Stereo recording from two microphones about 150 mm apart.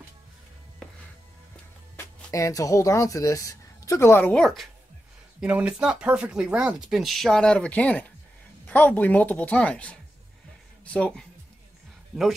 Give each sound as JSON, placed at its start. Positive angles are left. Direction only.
{"t": 2.0, "sound": "speech", "side_deg": 20}